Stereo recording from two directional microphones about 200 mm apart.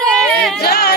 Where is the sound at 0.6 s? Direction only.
50° left (ahead or behind).